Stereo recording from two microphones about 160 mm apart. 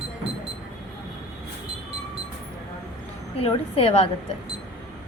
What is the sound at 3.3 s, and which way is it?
Speech, 40° left (ahead or behind).